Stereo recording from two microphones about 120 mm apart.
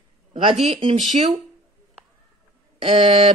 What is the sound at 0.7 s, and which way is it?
Speech, 45° right (ahead or behind).